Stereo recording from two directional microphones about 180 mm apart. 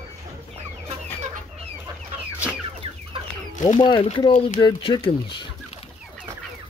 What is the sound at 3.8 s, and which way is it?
Speech, 30° left (ahead or behind).